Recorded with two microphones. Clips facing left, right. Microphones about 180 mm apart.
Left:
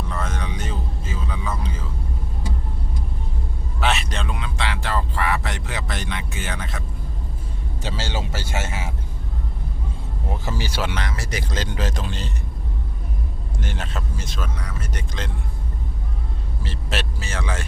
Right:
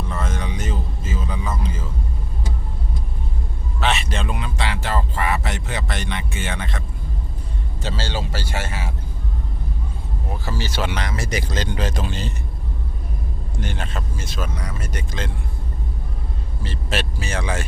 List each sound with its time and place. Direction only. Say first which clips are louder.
0.1 s a sound: right 1 dB; centre (ahead or behind)
3.8 s a sound: right 1 dB; 5° left (ahead or behind)
7.8 s speech: right 1 dB; 15° left (ahead or behind)
10.4 s speech: right 2 dB; 15° left (ahead or behind)
10.9 s speech: right 3 dB; 20° right (ahead or behind)
11.5 s speech: right 2 dB; centre (ahead or behind)
13.6 s speech: right 2 dB; centre (ahead or behind)
16.6 s speech: right 3 dB; centre (ahead or behind)
17.2 s speech: right 3 dB; 15° right (ahead or behind)